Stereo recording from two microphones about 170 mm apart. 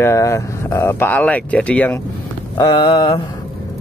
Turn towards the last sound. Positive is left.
turn(degrees=25)  # may be behind; listen again after turning